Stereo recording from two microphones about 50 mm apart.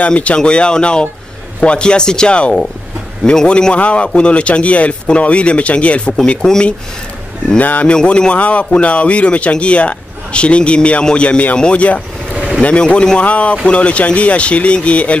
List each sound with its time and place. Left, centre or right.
0.0 s speech: left
7.5 s speech: left
7.9 s speech: centre
13.2 s speech: left